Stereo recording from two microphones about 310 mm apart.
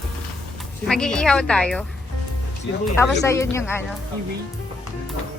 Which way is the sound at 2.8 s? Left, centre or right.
Centre.